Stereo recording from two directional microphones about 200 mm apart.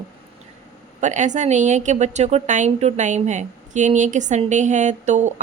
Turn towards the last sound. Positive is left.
turn(degrees=-35)  # may be behind; listen again after turning